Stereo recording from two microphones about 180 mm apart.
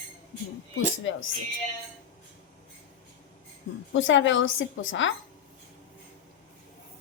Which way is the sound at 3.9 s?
90° left.